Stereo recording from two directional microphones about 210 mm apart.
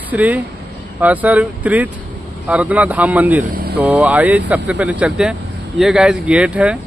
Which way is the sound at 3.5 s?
45° right (ahead or behind).